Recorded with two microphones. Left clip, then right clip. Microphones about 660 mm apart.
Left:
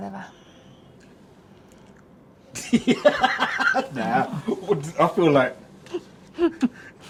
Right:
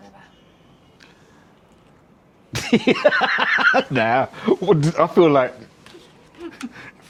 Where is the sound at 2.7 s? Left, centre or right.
Right.